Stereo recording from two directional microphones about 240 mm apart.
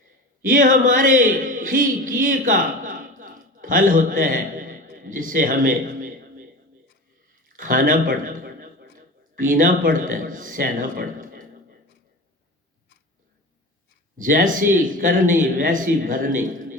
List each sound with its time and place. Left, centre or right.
0.4 s a man's voice: right
7.4 s a sound: right
14.2 s speech: right